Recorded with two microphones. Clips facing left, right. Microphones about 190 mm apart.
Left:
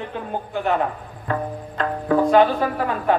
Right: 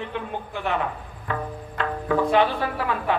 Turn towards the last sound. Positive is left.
turn(degrees=40)  # may be behind; listen again after turning